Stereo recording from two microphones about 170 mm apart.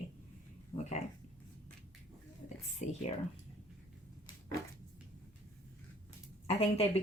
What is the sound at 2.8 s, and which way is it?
Speech, 45° left (ahead or behind).